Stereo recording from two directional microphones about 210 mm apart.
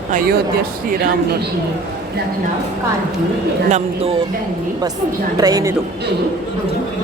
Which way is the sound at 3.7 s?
30° right (ahead or behind).